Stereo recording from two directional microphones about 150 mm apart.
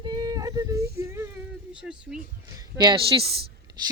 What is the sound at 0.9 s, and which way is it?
Whimper, 20° right (ahead or behind).